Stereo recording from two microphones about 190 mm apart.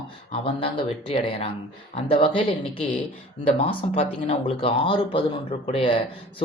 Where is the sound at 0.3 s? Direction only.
30° left (ahead or behind).